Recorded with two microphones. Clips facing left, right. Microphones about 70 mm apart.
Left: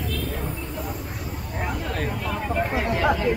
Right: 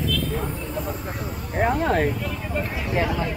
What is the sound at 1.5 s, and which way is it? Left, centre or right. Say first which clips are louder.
Speech: right 9 dB; right.